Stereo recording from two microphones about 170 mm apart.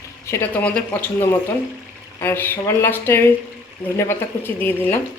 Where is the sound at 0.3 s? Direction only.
10° left (ahead or behind).